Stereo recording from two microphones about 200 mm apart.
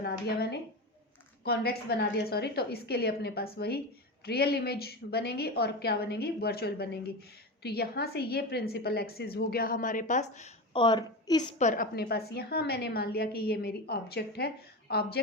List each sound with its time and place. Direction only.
0.0 s a woman's voice: 50° left (ahead or behind); by 10.5 s 35° left (ahead or behind)
10.8 s a woman's voice: 25° left (ahead or behind)
11.5 s a woman's voice: 40° left (ahead or behind)